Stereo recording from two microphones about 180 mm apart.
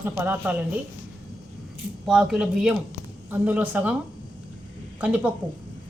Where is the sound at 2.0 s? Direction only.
5° right (ahead or behind).